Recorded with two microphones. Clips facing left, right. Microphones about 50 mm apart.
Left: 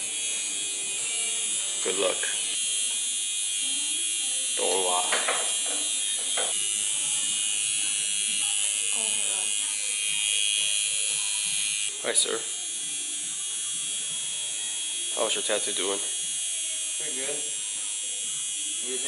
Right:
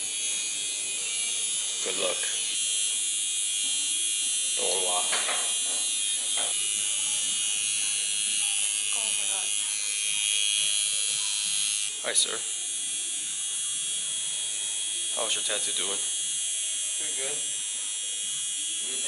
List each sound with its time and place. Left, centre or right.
1.8 s speech: centre
4.6 s electric shaver: centre
7.2 s electric shaver: centre
15.1 s speech: centre